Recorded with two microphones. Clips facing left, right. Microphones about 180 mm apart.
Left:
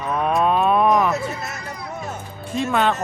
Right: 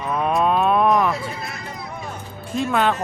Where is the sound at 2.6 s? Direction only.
Centre (ahead or behind).